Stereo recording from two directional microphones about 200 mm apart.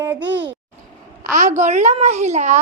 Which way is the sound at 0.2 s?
65° right (ahead or behind).